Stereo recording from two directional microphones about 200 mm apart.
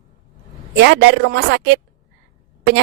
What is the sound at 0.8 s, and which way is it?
A woman's voice, 60° right (ahead or behind).